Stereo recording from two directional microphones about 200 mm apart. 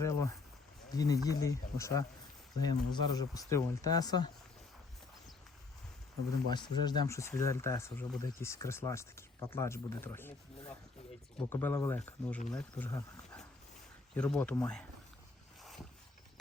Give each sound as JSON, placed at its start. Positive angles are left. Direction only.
{"t": 0.0, "sound": "speech", "side_deg": 15}
{"t": 6.5, "sound": "speech", "side_deg": 20}
{"t": 14.2, "sound": "speech", "side_deg": 5}